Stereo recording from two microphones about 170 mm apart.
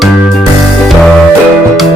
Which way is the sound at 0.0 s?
Centre (ahead or behind).